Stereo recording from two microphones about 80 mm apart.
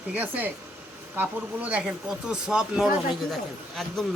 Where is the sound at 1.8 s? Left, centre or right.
Centre.